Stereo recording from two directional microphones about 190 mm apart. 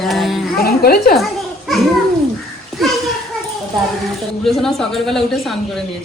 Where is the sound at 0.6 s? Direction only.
55° left (ahead or behind).